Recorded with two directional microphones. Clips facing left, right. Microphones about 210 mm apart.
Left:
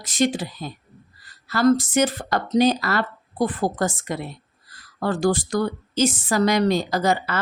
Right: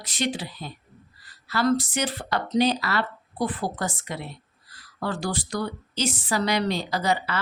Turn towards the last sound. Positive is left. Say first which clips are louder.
# left 4 dB
turn(degrees=45)  # may be behind; listen again after turning